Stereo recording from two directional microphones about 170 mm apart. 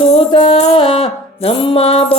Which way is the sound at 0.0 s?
35° left (ahead or behind).